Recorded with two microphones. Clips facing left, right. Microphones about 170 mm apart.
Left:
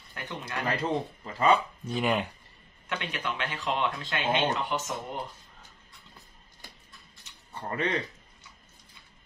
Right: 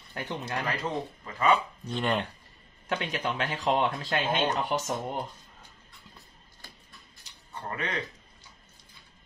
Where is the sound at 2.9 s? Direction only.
35° right (ahead or behind).